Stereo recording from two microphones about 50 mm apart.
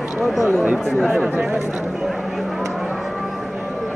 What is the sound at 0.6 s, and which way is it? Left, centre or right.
Speech, right.